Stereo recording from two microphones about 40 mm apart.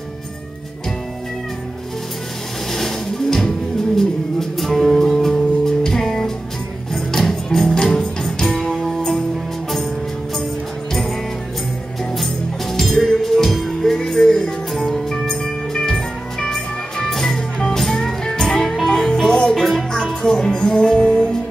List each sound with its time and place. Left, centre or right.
2.7 s music: centre
8.5 s music: centre
10.9 s music: centre
12.7 s music: centre
14.7 s music: centre
15.4 s music: centre